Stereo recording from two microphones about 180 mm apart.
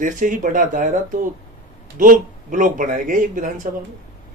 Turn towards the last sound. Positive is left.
turn(degrees=-50)  # may be behind; listen again after turning